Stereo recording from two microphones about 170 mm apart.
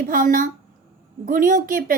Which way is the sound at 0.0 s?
55° right (ahead or behind).